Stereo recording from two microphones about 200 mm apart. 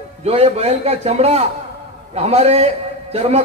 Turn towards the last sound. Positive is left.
turn(degrees=-30)  # may be behind; listen again after turning